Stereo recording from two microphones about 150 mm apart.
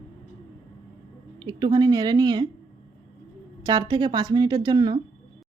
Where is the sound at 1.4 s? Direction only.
30° right (ahead or behind).